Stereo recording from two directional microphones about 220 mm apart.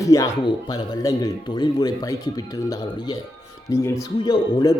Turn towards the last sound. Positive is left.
turn(degrees=20)  # may be behind; listen again after turning